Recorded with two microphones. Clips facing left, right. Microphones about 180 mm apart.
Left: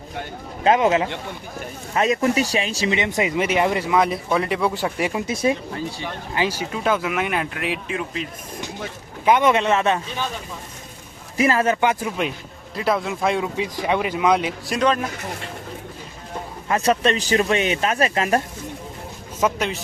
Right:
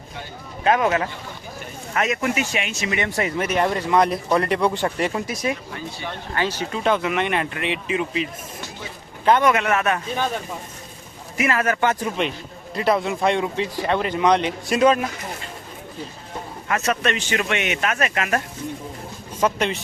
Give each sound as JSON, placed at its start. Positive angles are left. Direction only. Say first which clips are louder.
{"t": 0.6, "sound": "speech", "louder": "left 2 dB", "side_deg": 25}
{"t": 2.9, "sound": "speech", "louder": "left 1 dB", "side_deg": 20}
{"t": 5.2, "sound": "speech", "louder": "left 4 dB", "side_deg": 25}
{"t": 6.3, "sound": "speech", "louder": "left 1 dB", "side_deg": 10}
{"t": 9.4, "sound": "speech", "louder": "left 1 dB", "side_deg": 25}
{"t": 11.3, "sound": "speech", "louder": "left 3 dB", "side_deg": 30}
{"t": 11.8, "sound": "speech", "louder": "even", "side_deg": 10}
{"t": 14.8, "sound": "speech", "louder": "right 3 dB", "side_deg": -5}
{"t": 16.6, "sound": "speech", "louder": "left 3 dB", "side_deg": 30}
{"t": 19.4, "sound": "speech", "louder": "right 1 dB", "side_deg": 5}